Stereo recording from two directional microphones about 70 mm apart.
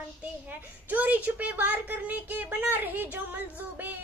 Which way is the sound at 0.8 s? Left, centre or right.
Right.